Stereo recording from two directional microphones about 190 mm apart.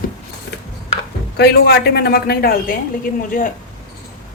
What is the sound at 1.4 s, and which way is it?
A man's voice, 60° left (ahead or behind).